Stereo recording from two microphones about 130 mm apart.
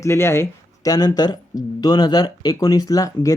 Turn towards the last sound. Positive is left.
turn(degrees=25)  # may be behind; listen again after turning